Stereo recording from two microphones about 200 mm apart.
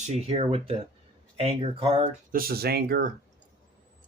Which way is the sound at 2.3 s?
50° right (ahead or behind).